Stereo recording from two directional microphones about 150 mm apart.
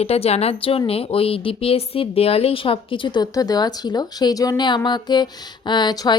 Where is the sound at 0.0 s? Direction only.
45° left (ahead or behind).